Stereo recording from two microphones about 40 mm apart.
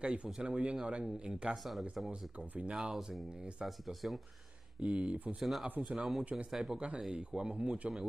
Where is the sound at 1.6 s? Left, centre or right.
Centre.